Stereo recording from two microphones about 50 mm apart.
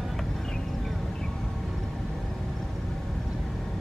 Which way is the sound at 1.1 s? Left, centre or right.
Centre.